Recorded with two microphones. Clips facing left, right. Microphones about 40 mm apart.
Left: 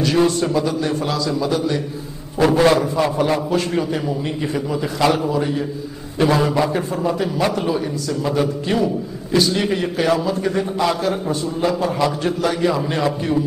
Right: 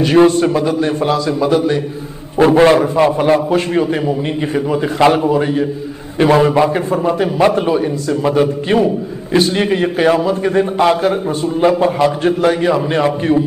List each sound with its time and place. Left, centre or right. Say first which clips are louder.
0.0 s a man's voice: right 7 dB; right